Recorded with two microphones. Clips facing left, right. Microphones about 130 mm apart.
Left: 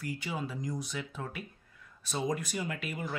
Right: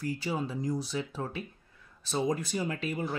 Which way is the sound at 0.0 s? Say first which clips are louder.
Right 4 dB; 30° right (ahead or behind).